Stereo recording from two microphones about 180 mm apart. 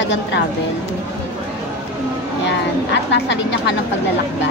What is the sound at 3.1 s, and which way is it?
Speech, 75° left (ahead or behind).